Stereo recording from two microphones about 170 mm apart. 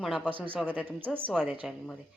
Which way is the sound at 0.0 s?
5° right (ahead or behind).